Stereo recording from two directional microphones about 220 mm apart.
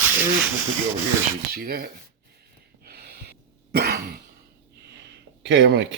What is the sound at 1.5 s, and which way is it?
Speech, 40° right (ahead or behind).